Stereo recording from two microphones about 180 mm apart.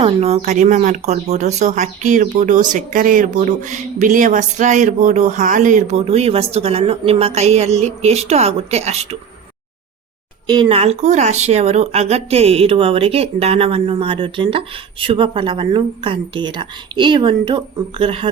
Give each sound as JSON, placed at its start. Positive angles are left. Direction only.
{"t": 0.0, "sound": "speech", "side_deg": -35}
{"t": 10.4, "sound": "speech", "side_deg": -25}